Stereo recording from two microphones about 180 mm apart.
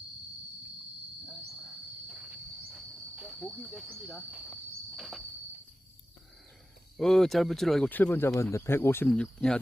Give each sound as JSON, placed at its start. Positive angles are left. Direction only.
{"t": 1.2, "sound": "cricket", "side_deg": -5}
{"t": 3.9, "sound": "speech", "side_deg": 5}
{"t": 4.9, "sound": "cricket", "side_deg": 0}
{"t": 6.9, "sound": "speech", "side_deg": 0}